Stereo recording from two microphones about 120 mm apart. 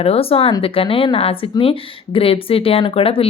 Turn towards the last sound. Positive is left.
turn(degrees=55)  # may be behind; listen again after turning